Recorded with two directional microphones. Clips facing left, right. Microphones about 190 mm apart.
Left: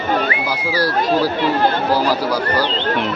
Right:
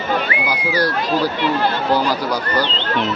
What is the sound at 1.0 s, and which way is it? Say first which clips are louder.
Speech: left 2 dB; 50° left (ahead or behind).